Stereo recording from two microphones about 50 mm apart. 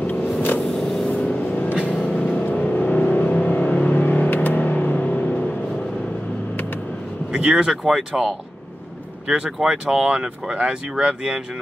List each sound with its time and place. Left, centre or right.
0.0 s vehicle: left
0.7 s vehicle: centre
2.4 s vehicle: left
7.3 s speech: centre
7.8 s speech: centre